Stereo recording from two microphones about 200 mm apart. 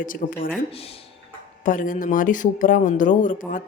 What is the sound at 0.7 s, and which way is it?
Speech, 30° left (ahead or behind).